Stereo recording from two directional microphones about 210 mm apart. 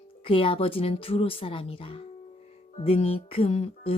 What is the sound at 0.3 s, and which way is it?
A woman's voice, 25° left (ahead or behind).